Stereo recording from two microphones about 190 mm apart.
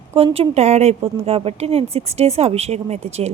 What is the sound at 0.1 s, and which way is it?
Speech, 30° right (ahead or behind).